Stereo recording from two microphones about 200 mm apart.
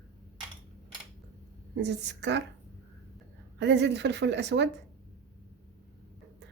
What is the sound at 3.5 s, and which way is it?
A woman's voice, 60° right (ahead or behind).